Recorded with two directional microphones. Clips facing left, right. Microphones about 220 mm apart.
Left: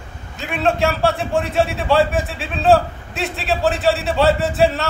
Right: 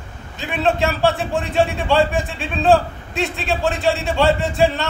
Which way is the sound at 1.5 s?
Centre (ahead or behind).